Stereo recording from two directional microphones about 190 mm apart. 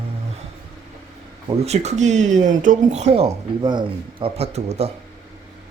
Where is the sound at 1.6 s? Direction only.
35° right (ahead or behind).